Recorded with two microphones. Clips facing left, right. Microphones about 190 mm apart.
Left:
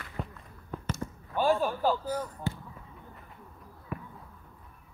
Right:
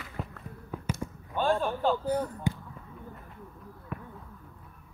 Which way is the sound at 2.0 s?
60° right (ahead or behind).